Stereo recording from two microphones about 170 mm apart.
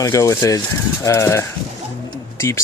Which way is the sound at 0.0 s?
15° left (ahead or behind).